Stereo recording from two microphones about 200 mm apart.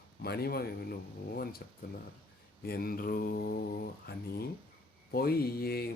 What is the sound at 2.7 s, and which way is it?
Speech, 50° left (ahead or behind).